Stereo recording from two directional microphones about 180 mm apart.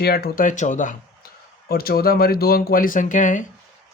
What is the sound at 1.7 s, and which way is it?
Speech, 60° left (ahead or behind).